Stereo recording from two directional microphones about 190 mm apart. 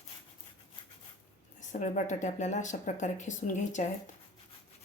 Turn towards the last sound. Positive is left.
turn(degrees=40)  # may be behind; listen again after turning